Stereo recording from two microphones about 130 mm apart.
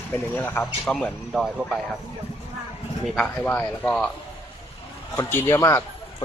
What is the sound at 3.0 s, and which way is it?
A man's voice, 5° left (ahead or behind).